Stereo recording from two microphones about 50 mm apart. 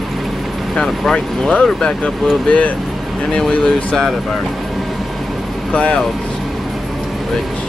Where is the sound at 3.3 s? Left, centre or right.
Centre.